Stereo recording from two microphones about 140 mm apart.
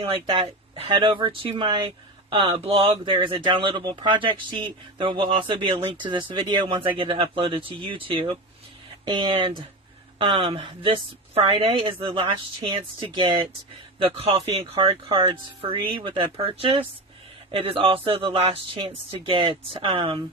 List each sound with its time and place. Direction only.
0.0 s speech: 40° right (ahead or behind)